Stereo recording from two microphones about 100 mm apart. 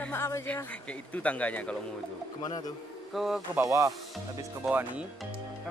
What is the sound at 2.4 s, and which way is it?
Speech, 40° left (ahead or behind).